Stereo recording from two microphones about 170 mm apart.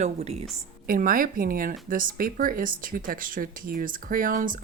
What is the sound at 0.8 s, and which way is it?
Speech, 55° right (ahead or behind).